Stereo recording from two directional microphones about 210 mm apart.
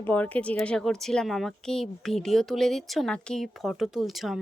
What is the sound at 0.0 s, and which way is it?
A woman's voice, 10° left (ahead or behind).